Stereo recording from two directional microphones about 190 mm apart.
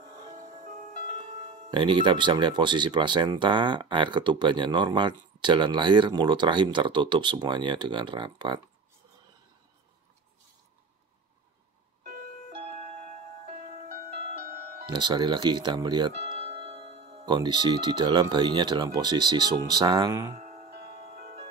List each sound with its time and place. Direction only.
1.4 s speech: 30° right (ahead or behind)
12.9 s music: 35° right (ahead or behind)
13.8 s music: 50° right (ahead or behind)
14.9 s speech: 25° right (ahead or behind)
20.3 s music: 35° right (ahead or behind)